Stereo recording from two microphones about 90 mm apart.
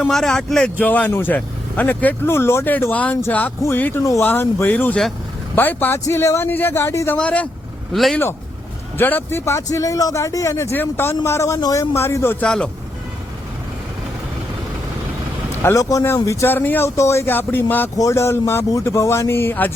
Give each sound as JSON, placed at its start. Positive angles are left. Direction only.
{"t": 0.1, "sound": "speech", "side_deg": 5}
{"t": 0.8, "sound": "speech", "side_deg": 20}
{"t": 7.2, "sound": "speech", "side_deg": 15}
{"t": 9.0, "sound": "speech", "side_deg": 20}
{"t": 12.4, "sound": "speech", "side_deg": 10}
{"t": 15.6, "sound": "speech", "side_deg": 35}
{"t": 16.5, "sound": "speech", "side_deg": 25}
{"t": 17.9, "sound": "speech", "side_deg": 35}